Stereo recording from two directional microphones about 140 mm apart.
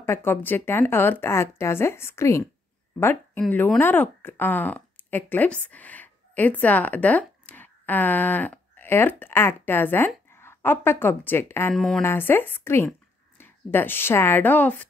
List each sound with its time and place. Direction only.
0.0 s speech: 15° left (ahead or behind)
11.7 s speech: 5° left (ahead or behind)
12.0 s speech: 15° left (ahead or behind)